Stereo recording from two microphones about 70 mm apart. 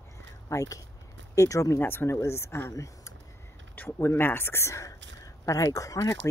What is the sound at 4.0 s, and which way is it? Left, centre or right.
Speech, left.